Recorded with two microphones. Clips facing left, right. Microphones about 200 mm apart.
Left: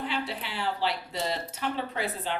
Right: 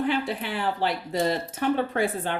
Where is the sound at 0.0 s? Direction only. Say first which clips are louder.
Right 7 dB; 50° right (ahead or behind).